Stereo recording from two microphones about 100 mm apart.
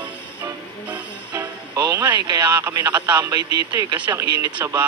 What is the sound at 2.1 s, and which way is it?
Speech, 45° right (ahead or behind).